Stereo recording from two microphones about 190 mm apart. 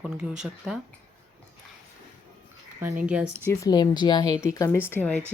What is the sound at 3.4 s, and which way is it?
Speech, 20° left (ahead or behind).